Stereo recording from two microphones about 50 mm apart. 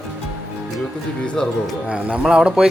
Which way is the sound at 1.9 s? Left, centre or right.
Right.